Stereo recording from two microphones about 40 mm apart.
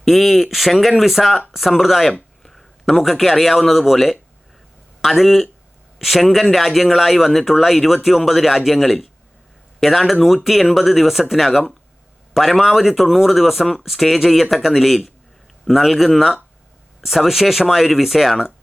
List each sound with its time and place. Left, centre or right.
0.0 s speech: centre